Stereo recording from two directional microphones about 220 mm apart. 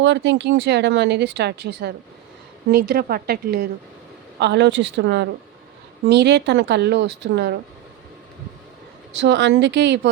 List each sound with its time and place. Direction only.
0.0 s speech: 55° right (ahead or behind)
9.1 s speech: 50° right (ahead or behind)